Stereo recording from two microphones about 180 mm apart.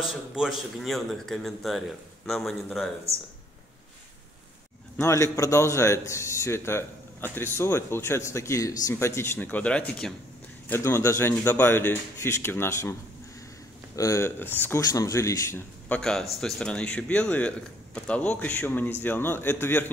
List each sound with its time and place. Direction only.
0.1 s a man's voice: 5° right (ahead or behind)
4.9 s a man's voice: 15° left (ahead or behind)
13.9 s a man's voice: 15° left (ahead or behind)
16.0 s a man's voice: 5° left (ahead or behind)